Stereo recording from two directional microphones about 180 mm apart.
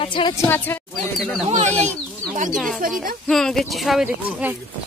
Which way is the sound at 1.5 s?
40° right (ahead or behind).